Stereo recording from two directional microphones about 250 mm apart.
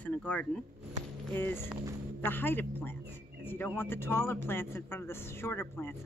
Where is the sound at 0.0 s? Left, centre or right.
Centre.